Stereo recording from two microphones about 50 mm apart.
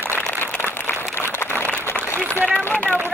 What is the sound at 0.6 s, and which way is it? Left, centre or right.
Applause, left.